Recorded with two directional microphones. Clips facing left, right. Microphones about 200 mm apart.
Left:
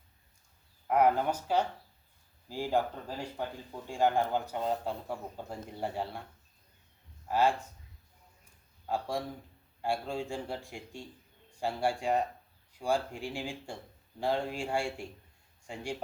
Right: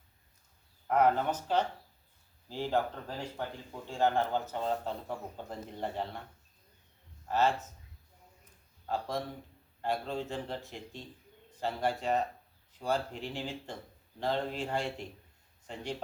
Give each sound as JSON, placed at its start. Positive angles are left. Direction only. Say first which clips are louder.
{"t": 0.9, "sound": "speech", "louder": "left 1 dB", "side_deg": 10}
{"t": 7.3, "sound": "speech", "louder": "left 1 dB", "side_deg": 10}
{"t": 8.9, "sound": "speech", "louder": "left 1 dB", "side_deg": 10}